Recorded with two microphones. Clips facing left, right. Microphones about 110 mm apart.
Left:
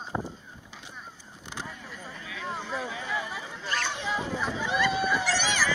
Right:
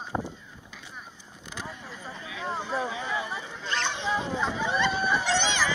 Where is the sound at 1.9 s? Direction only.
25° right (ahead or behind).